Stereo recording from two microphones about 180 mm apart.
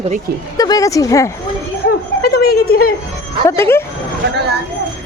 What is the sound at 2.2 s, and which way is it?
Speech, 65° left (ahead or behind).